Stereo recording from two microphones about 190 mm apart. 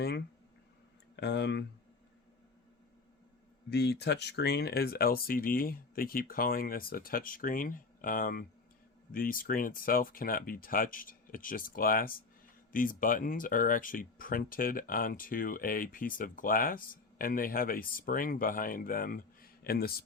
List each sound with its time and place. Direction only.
1.1 s speech: 65° left (ahead or behind)
3.7 s speech: 60° left (ahead or behind)